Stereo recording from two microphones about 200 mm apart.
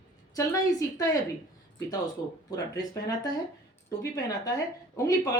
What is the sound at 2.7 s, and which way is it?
Speech, 20° left (ahead or behind).